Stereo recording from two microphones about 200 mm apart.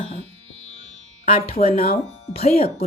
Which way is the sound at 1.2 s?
30° left (ahead or behind).